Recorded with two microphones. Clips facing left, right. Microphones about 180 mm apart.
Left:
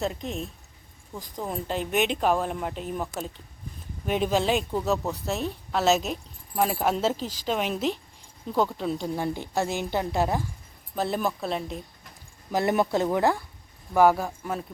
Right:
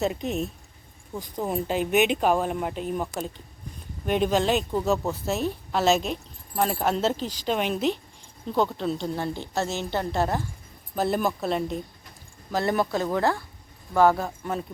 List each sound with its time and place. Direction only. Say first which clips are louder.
0.0 s a woman's voice: right 4 dB; 5° right (ahead or behind); by 10.4 s 10° left (ahead or behind)
10.9 s speech: right 2 dB; centre (ahead or behind)
12.5 s a woman's voice: left 1 dB; 15° left (ahead or behind)